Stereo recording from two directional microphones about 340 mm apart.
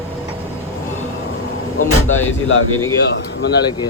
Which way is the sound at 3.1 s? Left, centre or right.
Left.